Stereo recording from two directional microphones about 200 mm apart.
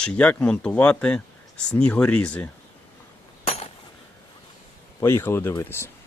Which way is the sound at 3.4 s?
30° left (ahead or behind).